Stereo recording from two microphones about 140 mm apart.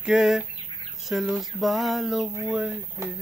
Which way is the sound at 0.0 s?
5° right (ahead or behind).